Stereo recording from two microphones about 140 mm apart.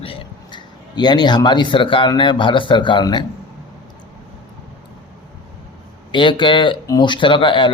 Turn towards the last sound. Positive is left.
turn(degrees=35)  # may be behind; listen again after turning